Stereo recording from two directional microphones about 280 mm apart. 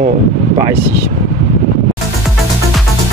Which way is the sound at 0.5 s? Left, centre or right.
Centre.